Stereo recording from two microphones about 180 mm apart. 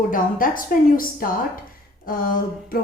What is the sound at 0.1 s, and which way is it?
A woman's voice, 50° left (ahead or behind).